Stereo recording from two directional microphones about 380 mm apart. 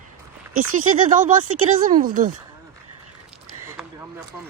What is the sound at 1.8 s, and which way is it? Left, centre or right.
Speech, right.